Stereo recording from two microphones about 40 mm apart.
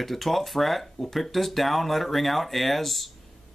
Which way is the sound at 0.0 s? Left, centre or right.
Centre.